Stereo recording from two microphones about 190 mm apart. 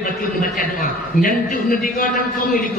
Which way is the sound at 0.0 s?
45° left (ahead or behind).